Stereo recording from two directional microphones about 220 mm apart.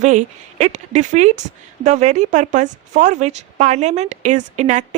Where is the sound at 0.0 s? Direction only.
35° right (ahead or behind).